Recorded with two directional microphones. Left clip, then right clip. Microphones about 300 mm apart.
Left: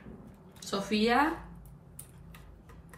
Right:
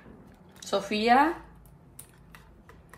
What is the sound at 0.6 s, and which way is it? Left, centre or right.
Speech, right.